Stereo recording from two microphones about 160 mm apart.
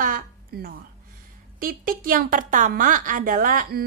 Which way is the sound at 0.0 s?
65° right (ahead or behind).